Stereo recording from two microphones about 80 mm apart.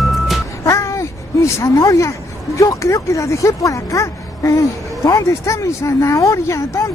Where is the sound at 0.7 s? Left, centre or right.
Left.